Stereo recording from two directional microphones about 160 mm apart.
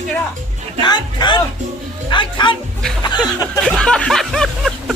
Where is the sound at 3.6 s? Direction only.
5° left (ahead or behind).